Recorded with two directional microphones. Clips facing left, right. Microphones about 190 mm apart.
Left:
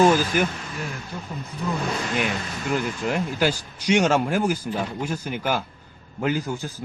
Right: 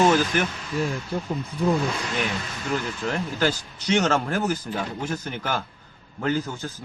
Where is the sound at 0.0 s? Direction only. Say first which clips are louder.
Left 2 dB; 10° left (ahead or behind).